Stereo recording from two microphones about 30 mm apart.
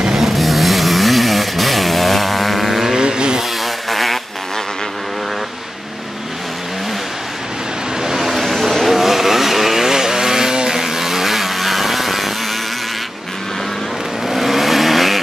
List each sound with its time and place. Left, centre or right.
0.1 s vehicle: centre
3.0 s chainsaw: right
3.6 s a sound: centre
8.2 s vehicle: centre
10.6 s chainsaw: centre
14.2 s vehicle: centre